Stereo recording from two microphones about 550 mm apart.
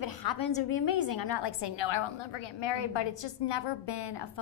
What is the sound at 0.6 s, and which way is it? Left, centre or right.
A woman's voice, left.